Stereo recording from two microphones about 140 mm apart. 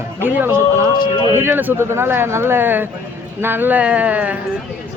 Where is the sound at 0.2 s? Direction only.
15° right (ahead or behind).